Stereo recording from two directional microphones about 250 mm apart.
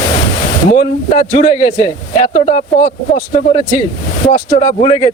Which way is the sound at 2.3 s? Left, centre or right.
Left.